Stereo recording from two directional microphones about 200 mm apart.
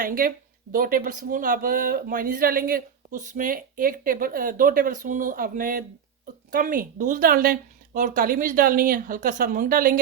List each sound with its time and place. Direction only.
0.0 s speech: 45° right (ahead or behind)